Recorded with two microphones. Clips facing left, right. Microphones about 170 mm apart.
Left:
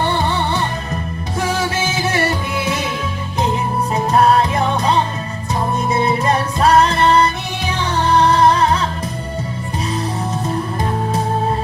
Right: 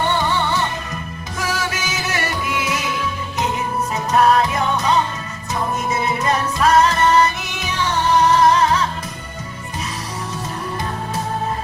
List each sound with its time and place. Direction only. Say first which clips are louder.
0.0 s music: left 1 dB; 30° left (ahead or behind)
3.9 s music: left 2 dB; 30° left (ahead or behind)